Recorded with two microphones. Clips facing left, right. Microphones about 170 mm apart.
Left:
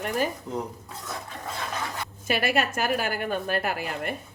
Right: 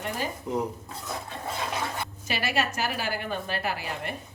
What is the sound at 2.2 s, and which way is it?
Speech, 55° left (ahead or behind).